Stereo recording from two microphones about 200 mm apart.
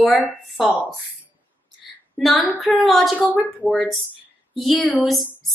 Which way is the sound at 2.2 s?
Centre (ahead or behind).